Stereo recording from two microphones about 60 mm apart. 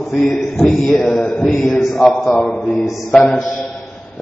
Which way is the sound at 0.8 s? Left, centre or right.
Centre.